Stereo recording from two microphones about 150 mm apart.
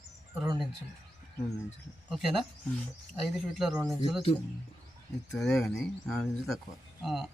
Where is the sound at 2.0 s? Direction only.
Centre (ahead or behind).